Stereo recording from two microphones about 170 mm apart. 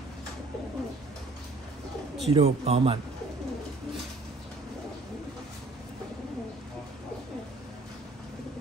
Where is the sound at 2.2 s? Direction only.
35° right (ahead or behind).